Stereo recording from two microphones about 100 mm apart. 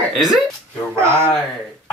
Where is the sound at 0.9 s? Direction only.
25° right (ahead or behind).